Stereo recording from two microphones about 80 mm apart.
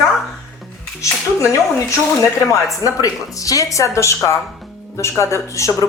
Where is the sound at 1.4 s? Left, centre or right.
Left.